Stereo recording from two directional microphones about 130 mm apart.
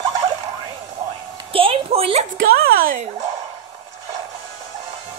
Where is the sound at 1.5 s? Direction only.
45° right (ahead or behind).